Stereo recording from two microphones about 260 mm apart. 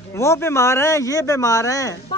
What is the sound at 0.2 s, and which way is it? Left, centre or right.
Speech, centre.